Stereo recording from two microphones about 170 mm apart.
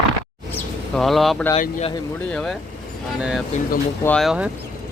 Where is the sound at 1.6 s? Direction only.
45° left (ahead or behind).